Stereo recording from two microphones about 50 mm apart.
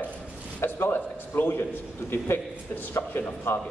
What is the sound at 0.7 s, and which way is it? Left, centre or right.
A man's voice, left.